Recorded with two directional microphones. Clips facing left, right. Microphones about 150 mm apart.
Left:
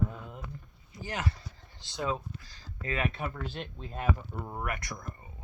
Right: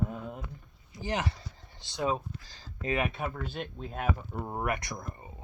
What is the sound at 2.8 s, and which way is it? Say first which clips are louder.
Speech: right 2 dB; 15° right (ahead or behind).